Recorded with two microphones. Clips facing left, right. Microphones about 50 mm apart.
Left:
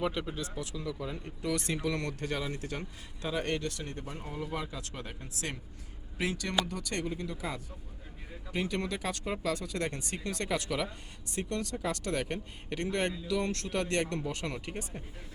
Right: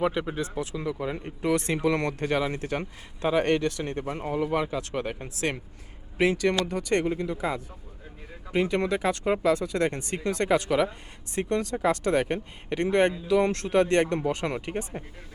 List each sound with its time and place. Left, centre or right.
0.0 s speech: right
3.2 s speech: right
6.3 s speech: right
8.5 s speech: right